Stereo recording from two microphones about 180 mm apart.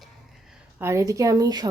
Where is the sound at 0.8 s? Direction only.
15° right (ahead or behind).